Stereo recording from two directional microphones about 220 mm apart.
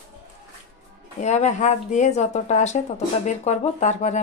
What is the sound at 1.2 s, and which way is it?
Speech, 30° left (ahead or behind).